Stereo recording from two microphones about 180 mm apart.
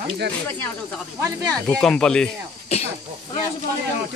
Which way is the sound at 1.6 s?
5° left (ahead or behind).